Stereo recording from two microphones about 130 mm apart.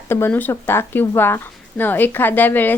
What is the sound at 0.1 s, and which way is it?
A woman's voice, 15° left (ahead or behind).